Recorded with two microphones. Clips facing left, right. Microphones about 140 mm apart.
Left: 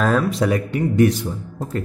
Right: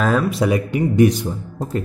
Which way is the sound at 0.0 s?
Centre (ahead or behind).